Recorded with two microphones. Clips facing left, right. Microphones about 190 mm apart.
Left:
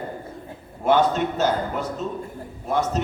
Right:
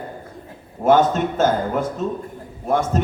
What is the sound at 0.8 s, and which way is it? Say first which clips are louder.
A man's voice: right 3 dB; 45° right (ahead or behind).